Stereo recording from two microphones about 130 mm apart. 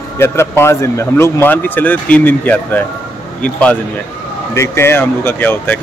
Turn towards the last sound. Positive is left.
turn(degrees=15)  # may be behind; listen again after turning